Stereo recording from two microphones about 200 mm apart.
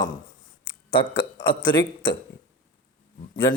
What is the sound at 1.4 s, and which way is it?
Speech, 25° left (ahead or behind).